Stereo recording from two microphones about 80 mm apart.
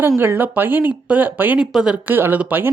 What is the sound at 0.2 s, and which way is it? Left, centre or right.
Speech, right.